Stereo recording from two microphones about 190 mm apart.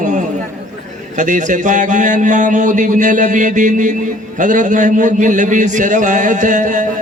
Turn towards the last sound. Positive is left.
turn(degrees=-40)  # may be behind; listen again after turning